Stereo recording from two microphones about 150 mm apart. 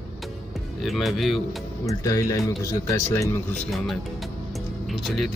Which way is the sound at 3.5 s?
Centre (ahead or behind).